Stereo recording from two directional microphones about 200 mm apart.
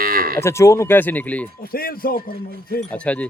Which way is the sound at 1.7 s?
50° left (ahead or behind).